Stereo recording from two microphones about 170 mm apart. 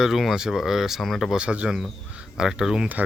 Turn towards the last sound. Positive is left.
turn(degrees=-5)  # may be behind; listen again after turning